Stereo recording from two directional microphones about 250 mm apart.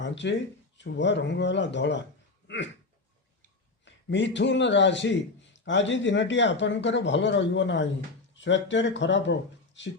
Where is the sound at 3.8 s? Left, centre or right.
Left.